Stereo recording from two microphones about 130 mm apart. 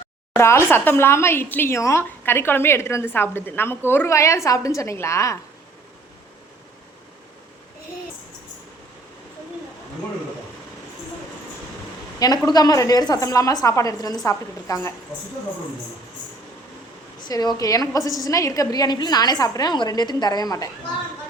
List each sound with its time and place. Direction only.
0.3 s a woman's voice: 20° left (ahead or behind)
12.2 s a woman's voice: 30° left (ahead or behind)
17.2 s a woman's voice: 30° left (ahead or behind)